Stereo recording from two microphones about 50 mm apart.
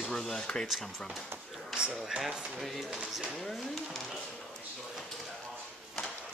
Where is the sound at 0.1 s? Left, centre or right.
Centre.